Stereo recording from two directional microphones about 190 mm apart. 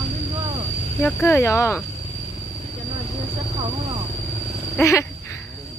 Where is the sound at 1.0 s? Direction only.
10° left (ahead or behind).